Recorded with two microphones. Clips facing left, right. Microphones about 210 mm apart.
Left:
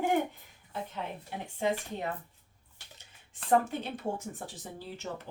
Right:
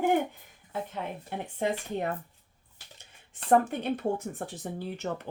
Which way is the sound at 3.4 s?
55° right (ahead or behind).